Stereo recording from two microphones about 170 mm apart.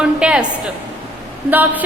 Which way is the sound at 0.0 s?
5° right (ahead or behind).